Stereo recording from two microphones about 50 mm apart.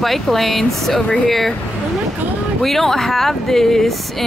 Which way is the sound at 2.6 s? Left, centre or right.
Centre.